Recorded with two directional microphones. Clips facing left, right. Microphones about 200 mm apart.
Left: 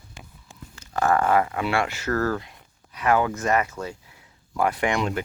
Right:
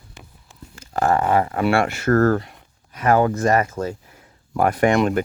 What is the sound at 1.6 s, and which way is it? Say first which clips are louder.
Speech: right 6 dB; 50° right (ahead or behind).